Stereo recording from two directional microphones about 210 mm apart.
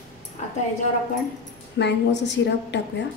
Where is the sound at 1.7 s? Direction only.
55° left (ahead or behind).